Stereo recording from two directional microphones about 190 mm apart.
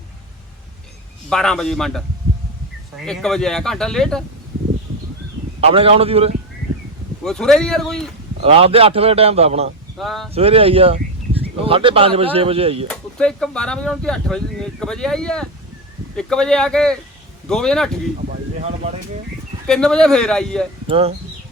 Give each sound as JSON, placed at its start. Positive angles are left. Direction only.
{"t": 1.3, "sound": "speech", "side_deg": 5}
{"t": 3.1, "sound": "speech", "side_deg": 5}
{"t": 5.5, "sound": "a man's voice", "side_deg": -30}
{"t": 7.3, "sound": "speech", "side_deg": 5}
{"t": 8.4, "sound": "a man's voice", "side_deg": -30}
{"t": 10.0, "sound": "speech", "side_deg": 0}
{"t": 10.3, "sound": "speech", "side_deg": -30}
{"t": 12.9, "sound": "speech", "side_deg": 5}
{"t": 19.6, "sound": "speech", "side_deg": 5}
{"t": 20.8, "sound": "speech", "side_deg": -30}